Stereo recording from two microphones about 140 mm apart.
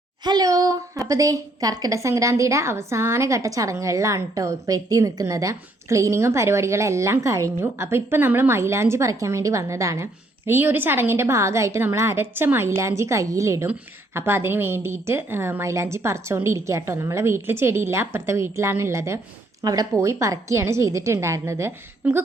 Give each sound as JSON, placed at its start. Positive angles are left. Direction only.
{"t": 0.3, "sound": "a woman's voice", "side_deg": -25}